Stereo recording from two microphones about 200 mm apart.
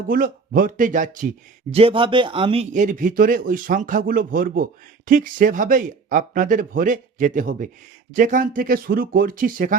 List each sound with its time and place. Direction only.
0.1 s speech: 45° right (ahead or behind)
1.7 s a man's voice: 25° right (ahead or behind)
2.7 s speech: 40° right (ahead or behind)